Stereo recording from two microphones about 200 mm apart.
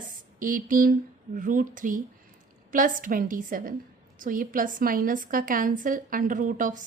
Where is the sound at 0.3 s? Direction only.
45° right (ahead or behind).